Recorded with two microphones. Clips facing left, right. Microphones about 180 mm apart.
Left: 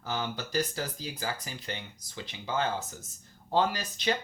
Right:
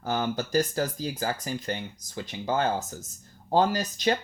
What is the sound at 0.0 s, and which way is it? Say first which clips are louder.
Speech: right 6 dB; 50° right (ahead or behind).